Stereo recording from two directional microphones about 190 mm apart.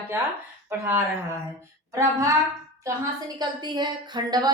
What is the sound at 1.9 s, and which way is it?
Speech, 15° right (ahead or behind).